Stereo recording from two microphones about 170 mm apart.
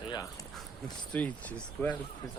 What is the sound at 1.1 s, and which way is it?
Speech, 10° left (ahead or behind).